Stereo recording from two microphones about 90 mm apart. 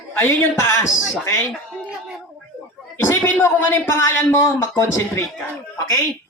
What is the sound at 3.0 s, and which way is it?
A man's voice, 25° left (ahead or behind).